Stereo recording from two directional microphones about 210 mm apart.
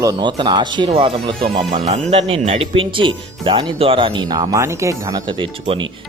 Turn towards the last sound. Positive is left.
turn(degrees=-25)  # may be behind; listen again after turning